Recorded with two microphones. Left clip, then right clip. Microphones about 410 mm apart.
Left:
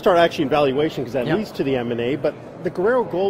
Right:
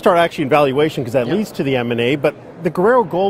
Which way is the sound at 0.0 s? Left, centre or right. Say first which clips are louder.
Right 2 dB; right.